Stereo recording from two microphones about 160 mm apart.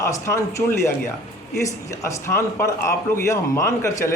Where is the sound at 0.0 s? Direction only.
20° left (ahead or behind).